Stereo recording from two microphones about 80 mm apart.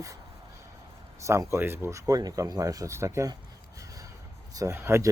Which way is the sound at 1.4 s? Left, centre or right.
Right.